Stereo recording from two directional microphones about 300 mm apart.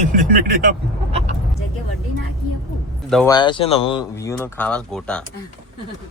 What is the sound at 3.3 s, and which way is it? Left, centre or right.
Speech, centre.